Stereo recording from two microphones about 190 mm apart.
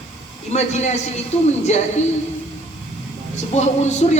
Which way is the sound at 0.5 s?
35° left (ahead or behind).